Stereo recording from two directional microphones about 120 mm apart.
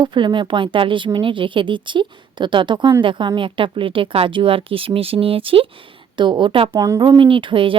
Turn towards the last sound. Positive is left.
turn(degrees=-45)  # may be behind; listen again after turning